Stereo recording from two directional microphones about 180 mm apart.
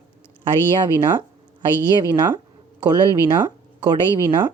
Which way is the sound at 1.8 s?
20° right (ahead or behind).